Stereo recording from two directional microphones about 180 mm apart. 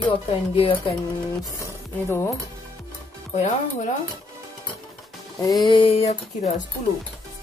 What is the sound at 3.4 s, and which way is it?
Speech, 40° left (ahead or behind).